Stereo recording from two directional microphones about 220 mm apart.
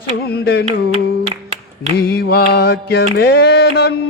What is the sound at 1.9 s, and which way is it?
Music, 45° left (ahead or behind).